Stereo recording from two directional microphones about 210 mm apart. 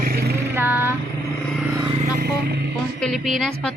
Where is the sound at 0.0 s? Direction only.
45° right (ahead or behind).